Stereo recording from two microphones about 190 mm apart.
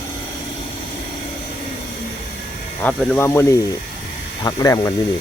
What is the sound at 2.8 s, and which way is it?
Speech, 5° left (ahead or behind).